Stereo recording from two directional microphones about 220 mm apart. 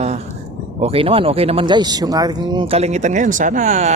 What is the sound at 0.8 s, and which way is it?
Speech, 25° right (ahead or behind).